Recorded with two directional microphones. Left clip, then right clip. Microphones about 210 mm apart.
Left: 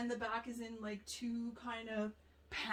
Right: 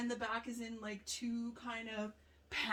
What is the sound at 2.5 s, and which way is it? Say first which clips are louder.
Speech: right 4 dB; 15° right (ahead or behind).